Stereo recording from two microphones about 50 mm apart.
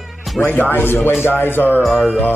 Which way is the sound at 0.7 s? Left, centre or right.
Left.